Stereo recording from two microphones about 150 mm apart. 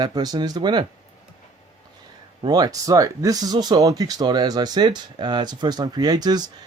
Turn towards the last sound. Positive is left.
turn(degrees=-25)  # may be behind; listen again after turning